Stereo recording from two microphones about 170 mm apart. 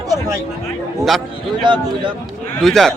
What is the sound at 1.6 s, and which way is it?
Speech, 25° right (ahead or behind).